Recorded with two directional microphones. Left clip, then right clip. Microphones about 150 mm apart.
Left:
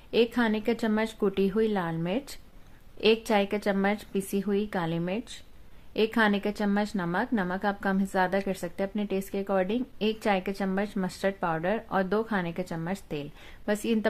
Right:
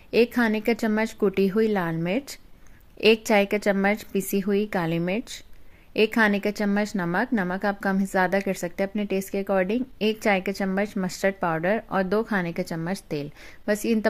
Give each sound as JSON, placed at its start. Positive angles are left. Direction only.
{"t": 0.1, "sound": "a woman's voice", "side_deg": -25}